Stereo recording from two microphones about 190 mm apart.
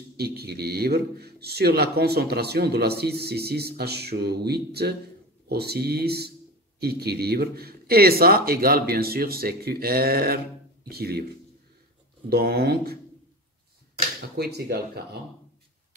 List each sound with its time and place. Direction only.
0.2 s a man's voice: 55° right (ahead or behind)
12.3 s a man's voice: 55° right (ahead or behind)
14.3 s a man's voice: 55° right (ahead or behind)